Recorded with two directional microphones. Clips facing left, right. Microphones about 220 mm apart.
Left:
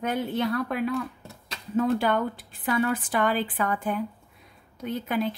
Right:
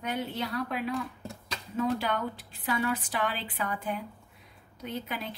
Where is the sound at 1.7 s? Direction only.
50° left (ahead or behind).